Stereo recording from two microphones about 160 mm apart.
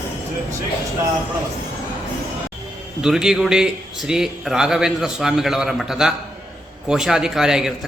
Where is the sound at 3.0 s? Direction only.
5° right (ahead or behind).